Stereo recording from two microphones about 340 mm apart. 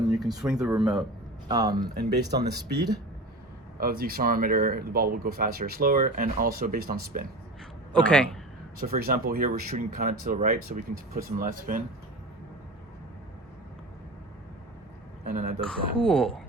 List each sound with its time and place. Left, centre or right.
0.0 s speech: centre
2.0 s speech: right
3.8 s speech: right
7.9 s speech: centre
8.8 s speech: right
15.2 s a sound: right
15.6 s speech: centre